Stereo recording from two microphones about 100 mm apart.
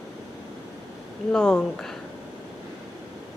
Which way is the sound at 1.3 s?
5° left (ahead or behind).